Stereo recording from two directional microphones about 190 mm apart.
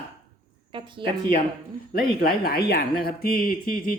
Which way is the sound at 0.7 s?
25° right (ahead or behind).